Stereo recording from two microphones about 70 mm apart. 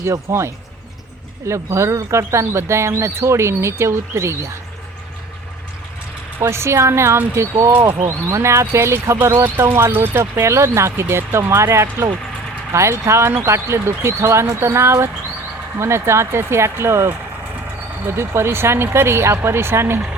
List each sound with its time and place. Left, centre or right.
0.0 s speech: right
6.4 s speech: right